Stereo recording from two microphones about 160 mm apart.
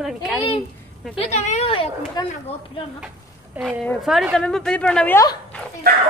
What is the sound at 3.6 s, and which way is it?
Speech, 10° right (ahead or behind).